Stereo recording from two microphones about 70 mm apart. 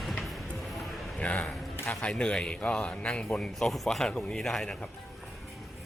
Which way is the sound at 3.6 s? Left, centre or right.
Centre.